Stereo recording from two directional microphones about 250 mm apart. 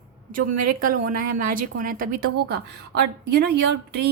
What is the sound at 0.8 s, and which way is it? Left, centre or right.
Speech, right.